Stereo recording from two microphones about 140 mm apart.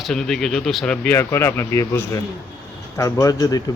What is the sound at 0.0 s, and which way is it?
Speech, 5° left (ahead or behind).